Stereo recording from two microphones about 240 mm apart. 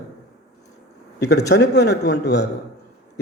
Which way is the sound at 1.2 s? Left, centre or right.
Left.